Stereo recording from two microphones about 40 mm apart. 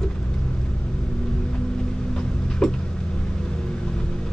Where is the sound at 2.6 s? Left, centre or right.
Centre.